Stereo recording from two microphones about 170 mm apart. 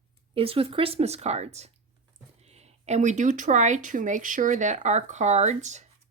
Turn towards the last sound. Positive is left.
turn(degrees=-45)  # may be behind; listen again after turning